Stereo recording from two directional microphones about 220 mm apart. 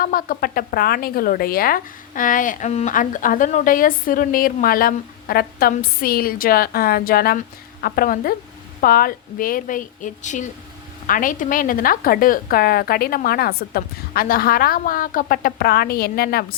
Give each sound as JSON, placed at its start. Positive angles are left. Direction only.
{"t": 0.0, "sound": "a woman's voice", "side_deg": 40}